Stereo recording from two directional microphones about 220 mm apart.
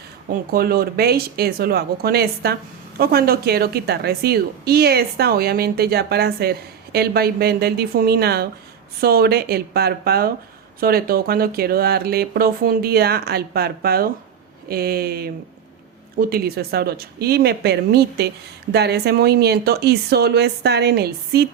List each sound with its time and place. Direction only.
0.5 s a woman's voice: 45° right (ahead or behind)